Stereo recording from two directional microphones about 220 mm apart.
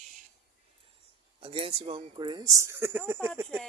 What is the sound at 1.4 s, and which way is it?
Speech, 25° right (ahead or behind).